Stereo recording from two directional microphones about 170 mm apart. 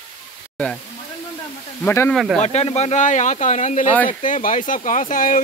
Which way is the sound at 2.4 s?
40° left (ahead or behind).